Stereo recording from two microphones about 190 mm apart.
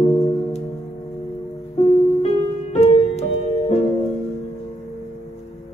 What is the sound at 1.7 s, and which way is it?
Music, 35° left (ahead or behind).